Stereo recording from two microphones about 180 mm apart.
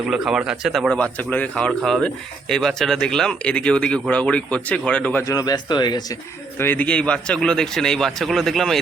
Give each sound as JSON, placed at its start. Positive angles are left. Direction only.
{"t": 0.1, "sound": "a man's voice", "side_deg": -5}
{"t": 5.3, "sound": "speech", "side_deg": 20}
{"t": 6.6, "sound": "a man's voice", "side_deg": 10}